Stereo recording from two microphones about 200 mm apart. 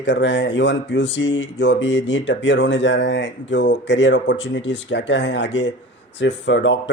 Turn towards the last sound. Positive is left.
turn(degrees=65)  # may be behind; listen again after turning